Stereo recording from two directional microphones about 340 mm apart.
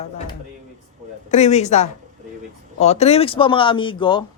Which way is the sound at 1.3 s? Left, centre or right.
Centre.